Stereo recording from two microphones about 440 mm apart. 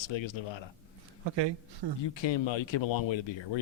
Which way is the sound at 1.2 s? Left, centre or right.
Right.